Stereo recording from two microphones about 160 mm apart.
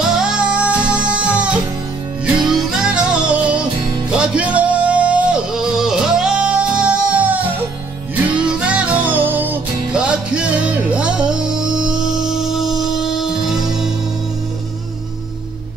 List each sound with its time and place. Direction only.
0.1 s music: 5° right (ahead or behind)
2.5 s music: 5° right (ahead or behind)